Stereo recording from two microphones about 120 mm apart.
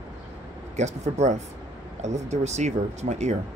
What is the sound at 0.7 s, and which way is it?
Speech, 75° right (ahead or behind).